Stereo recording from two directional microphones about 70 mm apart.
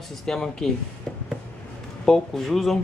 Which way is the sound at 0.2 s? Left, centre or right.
Centre.